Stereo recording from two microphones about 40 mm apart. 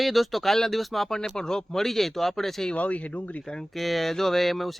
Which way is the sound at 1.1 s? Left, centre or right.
Centre.